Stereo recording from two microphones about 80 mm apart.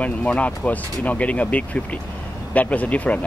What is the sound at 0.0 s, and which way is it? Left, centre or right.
Speech, centre.